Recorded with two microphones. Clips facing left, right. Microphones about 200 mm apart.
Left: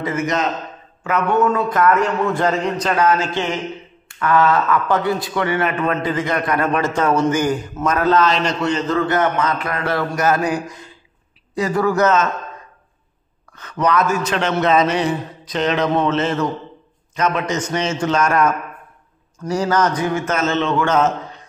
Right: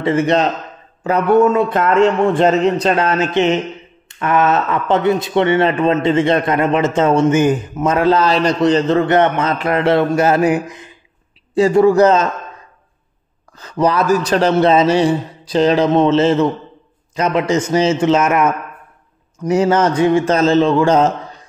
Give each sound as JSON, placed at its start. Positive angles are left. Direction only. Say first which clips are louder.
{"t": 0.0, "sound": "a man's voice", "louder": "right 6 dB", "side_deg": -30}
{"t": 13.6, "sound": "a man's voice", "louder": "right 3 dB", "side_deg": -30}